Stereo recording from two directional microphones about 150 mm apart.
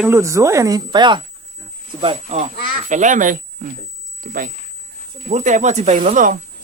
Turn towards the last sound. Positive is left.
turn(degrees=-60)  # may be behind; listen again after turning